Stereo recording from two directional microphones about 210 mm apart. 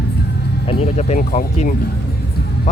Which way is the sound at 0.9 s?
35° left (ahead or behind).